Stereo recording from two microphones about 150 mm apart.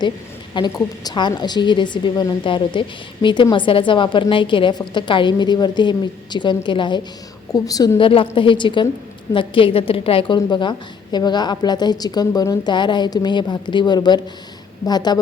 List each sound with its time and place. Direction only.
0.5 s a woman's voice: 30° left (ahead or behind)